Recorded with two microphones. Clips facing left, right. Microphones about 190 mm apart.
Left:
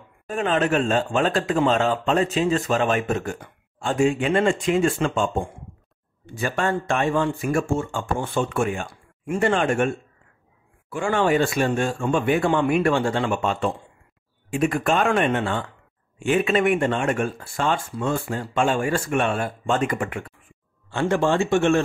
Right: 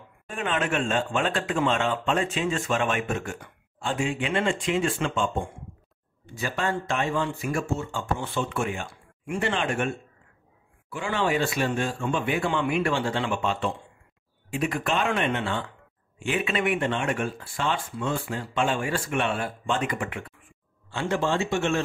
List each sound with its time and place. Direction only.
0.3 s a man's voice: 40° left (ahead or behind)
6.3 s speech: 50° left (ahead or behind)
10.9 s speech: 45° left (ahead or behind)